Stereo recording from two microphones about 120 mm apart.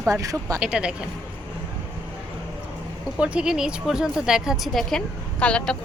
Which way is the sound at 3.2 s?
10° right (ahead or behind).